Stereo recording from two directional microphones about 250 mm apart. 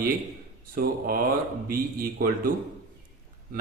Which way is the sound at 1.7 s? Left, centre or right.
Right.